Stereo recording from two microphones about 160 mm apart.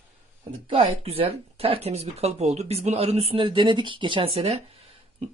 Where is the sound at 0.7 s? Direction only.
40° right (ahead or behind).